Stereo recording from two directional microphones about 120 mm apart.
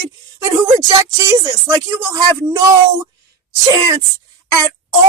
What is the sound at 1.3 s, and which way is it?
Speech, 25° right (ahead or behind).